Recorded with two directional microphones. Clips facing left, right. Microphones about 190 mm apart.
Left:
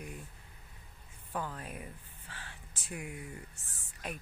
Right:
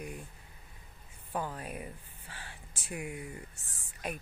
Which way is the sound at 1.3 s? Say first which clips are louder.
Right 2 dB; 20° right (ahead or behind).